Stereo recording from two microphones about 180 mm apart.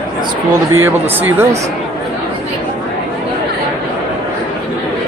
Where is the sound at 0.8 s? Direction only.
10° right (ahead or behind).